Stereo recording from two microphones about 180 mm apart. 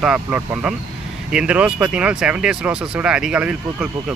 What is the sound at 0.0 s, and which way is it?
Speech, 5° right (ahead or behind).